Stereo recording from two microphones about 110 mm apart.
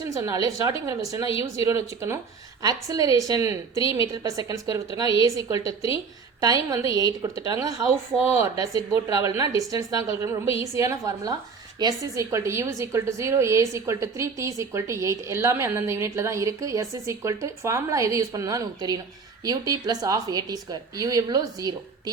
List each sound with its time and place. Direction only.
0.2 s a woman's voice: 30° right (ahead or behind)
8.1 s speech: 5° left (ahead or behind)
8.5 s a woman's voice: 35° right (ahead or behind)